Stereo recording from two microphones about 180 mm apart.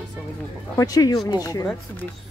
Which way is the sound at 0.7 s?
20° left (ahead or behind).